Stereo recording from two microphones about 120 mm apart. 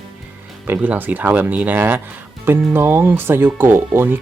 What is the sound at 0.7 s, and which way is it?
Speech, 15° right (ahead or behind).